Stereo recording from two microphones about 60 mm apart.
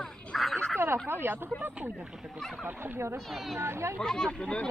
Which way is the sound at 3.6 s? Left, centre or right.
Right.